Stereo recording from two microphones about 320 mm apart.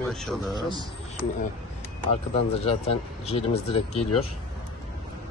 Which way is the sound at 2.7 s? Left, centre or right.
Centre.